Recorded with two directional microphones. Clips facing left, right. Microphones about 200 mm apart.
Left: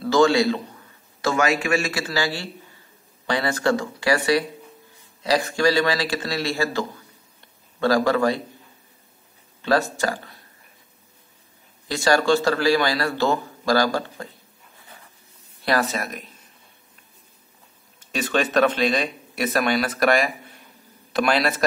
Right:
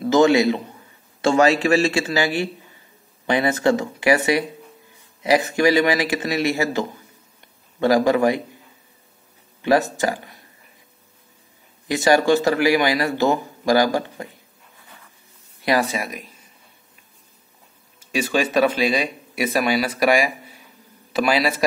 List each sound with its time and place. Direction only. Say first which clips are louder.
0.0 s a man's voice: right 2 dB; 20° right (ahead or behind)
1.2 s a man's voice: right 5 dB; 30° right (ahead or behind)
9.6 s speech: right 3 dB; 20° right (ahead or behind)
11.9 s a man's voice: right 3 dB; 20° right (ahead or behind)
15.6 s speech: right 2 dB; 15° right (ahead or behind)
18.1 s a man's voice: right 1 dB; 5° right (ahead or behind)